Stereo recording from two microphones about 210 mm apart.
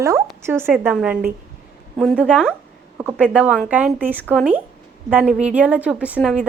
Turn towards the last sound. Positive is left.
turn(degrees=-5)  # may be behind; listen again after turning